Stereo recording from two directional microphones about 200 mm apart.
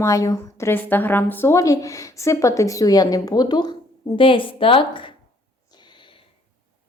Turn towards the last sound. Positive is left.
turn(degrees=25)  # may be behind; listen again after turning